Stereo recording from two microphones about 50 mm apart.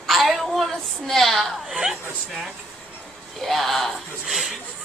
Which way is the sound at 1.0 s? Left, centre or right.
Centre.